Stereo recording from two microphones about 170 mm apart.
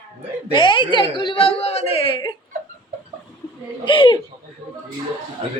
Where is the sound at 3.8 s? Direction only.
30° left (ahead or behind).